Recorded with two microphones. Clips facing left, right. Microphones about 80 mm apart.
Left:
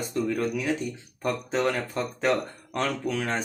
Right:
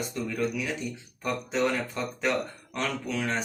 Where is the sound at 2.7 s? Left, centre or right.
Left.